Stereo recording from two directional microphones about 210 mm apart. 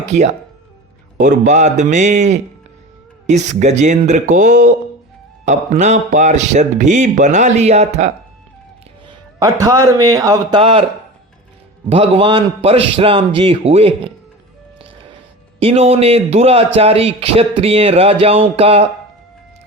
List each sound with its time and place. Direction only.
0.0 s speech: 35° right (ahead or behind)
9.4 s a man's voice: 15° right (ahead or behind)
11.9 s a man's voice: 25° right (ahead or behind)
15.6 s a man's voice: 30° right (ahead or behind)